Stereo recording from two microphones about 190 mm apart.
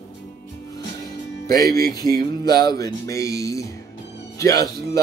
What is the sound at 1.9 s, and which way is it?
Music, 20° left (ahead or behind).